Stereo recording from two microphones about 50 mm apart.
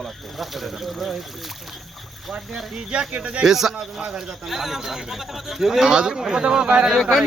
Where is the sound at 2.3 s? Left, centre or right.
Centre.